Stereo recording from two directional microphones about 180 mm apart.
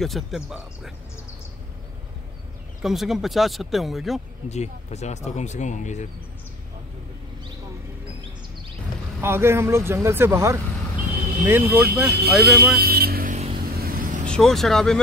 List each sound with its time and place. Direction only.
0.0 s speech: centre (ahead or behind)
2.8 s speech: centre (ahead or behind)
4.5 s speech: 40° left (ahead or behind)
9.2 s speech: 15° right (ahead or behind)
12.7 s vehicle: 60° right (ahead or behind)
14.2 s speech: 5° left (ahead or behind)